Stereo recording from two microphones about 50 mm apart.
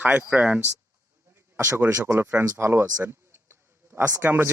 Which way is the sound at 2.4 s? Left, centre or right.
Right.